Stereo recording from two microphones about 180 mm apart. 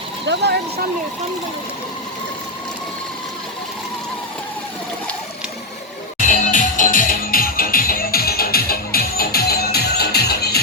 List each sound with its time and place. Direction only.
0.3 s speech: 75° right (ahead or behind)
6.1 s music: 45° left (ahead or behind); by 10.6 s 60° left (ahead or behind)